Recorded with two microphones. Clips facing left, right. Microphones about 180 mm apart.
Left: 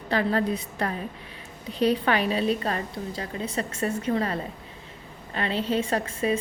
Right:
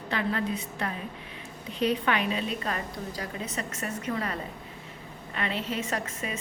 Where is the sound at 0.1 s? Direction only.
35° left (ahead or behind).